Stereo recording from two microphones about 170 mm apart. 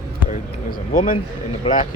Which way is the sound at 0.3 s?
50° left (ahead or behind).